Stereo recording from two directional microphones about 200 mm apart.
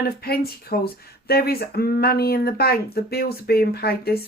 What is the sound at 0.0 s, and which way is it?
Speech, 50° left (ahead or behind).